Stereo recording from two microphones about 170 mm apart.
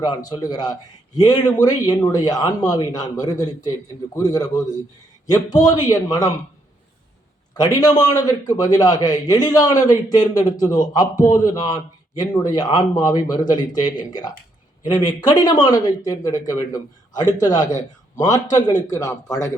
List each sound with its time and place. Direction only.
0.0 s a man's voice: 25° left (ahead or behind)
7.5 s a man's voice: 25° left (ahead or behind)